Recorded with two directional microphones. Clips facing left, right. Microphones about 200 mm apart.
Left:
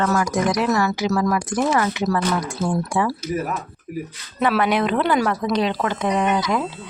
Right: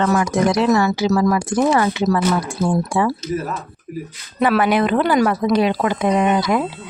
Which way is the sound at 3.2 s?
10° left (ahead or behind).